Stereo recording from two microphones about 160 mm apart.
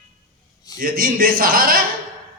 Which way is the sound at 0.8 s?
60° right (ahead or behind).